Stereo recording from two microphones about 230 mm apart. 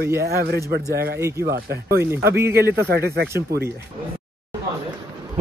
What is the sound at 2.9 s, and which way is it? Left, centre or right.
Speech, right.